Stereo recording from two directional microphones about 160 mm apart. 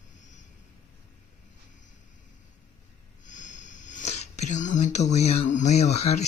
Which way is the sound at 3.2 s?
50° left (ahead or behind).